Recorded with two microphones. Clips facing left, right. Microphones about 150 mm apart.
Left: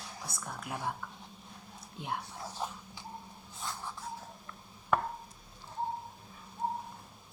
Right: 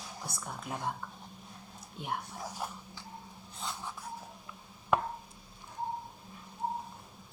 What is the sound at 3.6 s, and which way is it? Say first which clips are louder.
Writing: right 1 dB; 15° right (ahead or behind).